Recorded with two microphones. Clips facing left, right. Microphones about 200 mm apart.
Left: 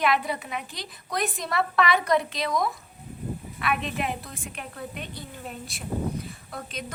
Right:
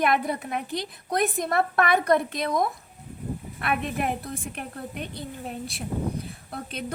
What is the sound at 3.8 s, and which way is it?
Speech, 55° right (ahead or behind).